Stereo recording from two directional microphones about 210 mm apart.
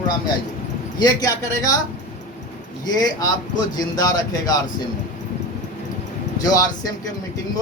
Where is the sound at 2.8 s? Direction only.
20° left (ahead or behind).